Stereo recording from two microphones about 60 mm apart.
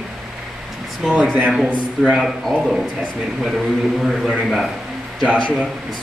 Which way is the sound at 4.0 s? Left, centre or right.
Centre.